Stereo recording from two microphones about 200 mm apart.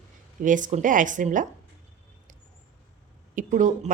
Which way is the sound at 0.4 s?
40° right (ahead or behind).